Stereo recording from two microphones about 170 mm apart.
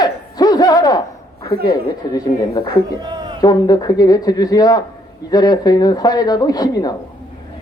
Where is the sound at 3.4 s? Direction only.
25° left (ahead or behind).